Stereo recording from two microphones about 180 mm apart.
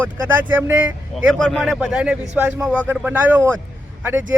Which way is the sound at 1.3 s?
5° left (ahead or behind).